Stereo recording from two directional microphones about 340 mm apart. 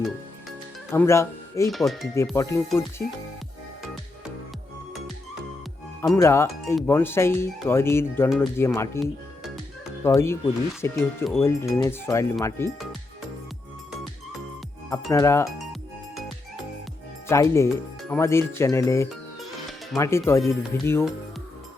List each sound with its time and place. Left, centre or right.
0.9 s speech: centre
6.0 s speech: centre
14.8 s speech: centre
17.2 s speech: centre